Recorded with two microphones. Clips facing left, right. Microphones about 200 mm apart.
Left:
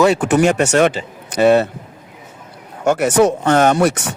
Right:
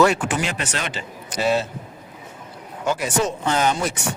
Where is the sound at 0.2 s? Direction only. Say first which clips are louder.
Left 12 dB; 60° left (ahead or behind).